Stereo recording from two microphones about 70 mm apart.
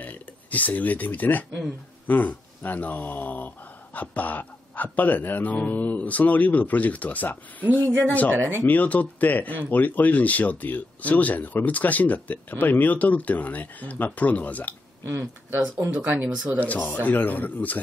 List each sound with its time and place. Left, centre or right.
0.0 s speech: left
7.8 s speech: right
8.6 s speech: left
15.9 s speech: right
16.5 s speech: left